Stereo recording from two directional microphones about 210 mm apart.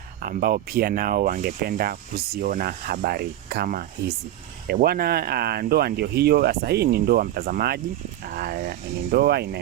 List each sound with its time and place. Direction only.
0.2 s speech: 45° right (ahead or behind)